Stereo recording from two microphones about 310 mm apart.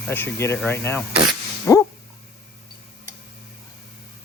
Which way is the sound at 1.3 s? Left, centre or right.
Centre.